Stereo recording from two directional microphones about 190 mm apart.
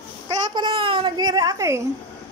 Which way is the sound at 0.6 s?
25° right (ahead or behind).